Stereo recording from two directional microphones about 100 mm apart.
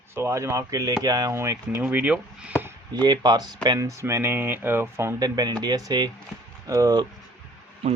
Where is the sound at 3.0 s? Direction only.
45° right (ahead or behind).